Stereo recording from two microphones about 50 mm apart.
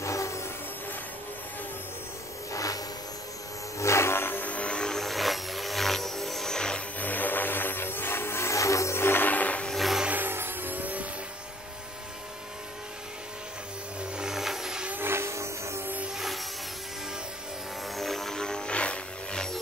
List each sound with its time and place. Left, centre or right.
0.0 s a sound: left
3.7 s a sound: left
4.5 s vehicle: left
4.9 s vehicle: centre
7.0 s vehicle: left
9.0 s music: left
9.7 s music: centre
10.1 s vehicle: right
14.1 s a sound: centre
15.0 s train: right
17.9 s vehicle: centre